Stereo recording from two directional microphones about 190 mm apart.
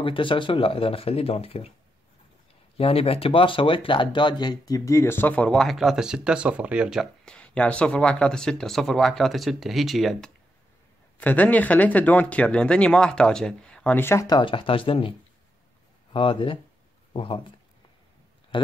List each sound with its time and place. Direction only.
0.0 s speech: 25° left (ahead or behind)
2.8 s speech: 30° left (ahead or behind)
18.5 s speech: 25° left (ahead or behind)